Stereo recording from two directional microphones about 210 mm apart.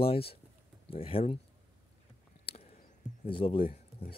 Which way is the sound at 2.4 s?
30° left (ahead or behind).